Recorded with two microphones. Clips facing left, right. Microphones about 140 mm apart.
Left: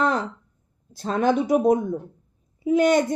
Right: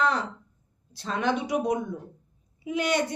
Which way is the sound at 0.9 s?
45° left (ahead or behind).